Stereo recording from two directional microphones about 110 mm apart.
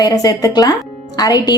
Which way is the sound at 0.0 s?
35° left (ahead or behind).